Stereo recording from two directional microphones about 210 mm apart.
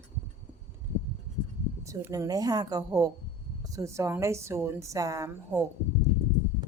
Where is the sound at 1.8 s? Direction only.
15° right (ahead or behind).